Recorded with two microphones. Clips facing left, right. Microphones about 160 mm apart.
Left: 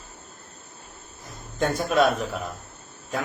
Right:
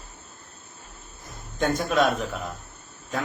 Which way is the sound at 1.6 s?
10° left (ahead or behind).